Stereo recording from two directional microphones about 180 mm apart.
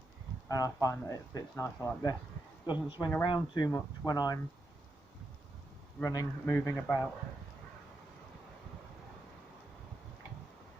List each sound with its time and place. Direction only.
0.4 s speech: 20° left (ahead or behind)
6.0 s a man's voice: 15° left (ahead or behind)